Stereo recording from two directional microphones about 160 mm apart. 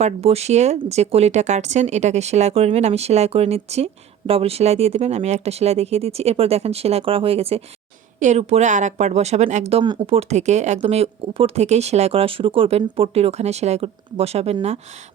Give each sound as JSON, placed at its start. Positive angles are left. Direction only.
{"t": 0.0, "sound": "speech", "side_deg": -40}